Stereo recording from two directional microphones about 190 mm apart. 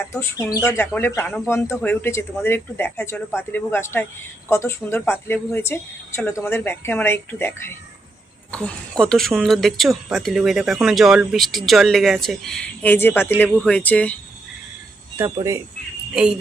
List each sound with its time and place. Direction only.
0.0 s speech: 15° left (ahead or behind)
15.4 s speech: 15° right (ahead or behind)
16.1 s speech: 5° right (ahead or behind)